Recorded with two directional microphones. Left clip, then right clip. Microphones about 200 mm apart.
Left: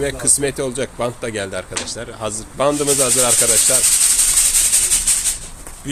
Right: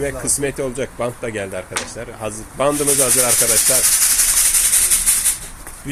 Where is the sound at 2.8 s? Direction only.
Centre (ahead or behind).